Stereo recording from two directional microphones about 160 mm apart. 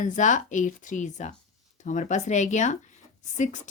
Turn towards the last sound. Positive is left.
turn(degrees=50)  # may be behind; listen again after turning